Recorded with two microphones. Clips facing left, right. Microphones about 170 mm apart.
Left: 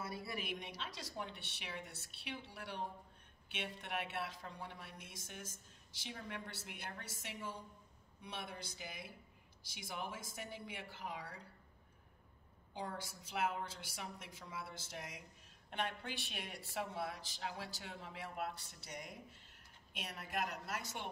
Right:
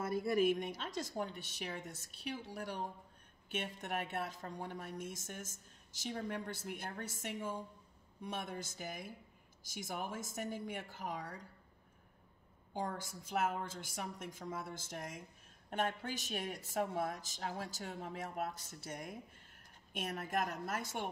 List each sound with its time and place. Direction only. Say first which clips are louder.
0.0 s a woman's voice: right 12 dB; 50° right (ahead or behind)
12.7 s a woman's voice: right 4 dB; 45° right (ahead or behind)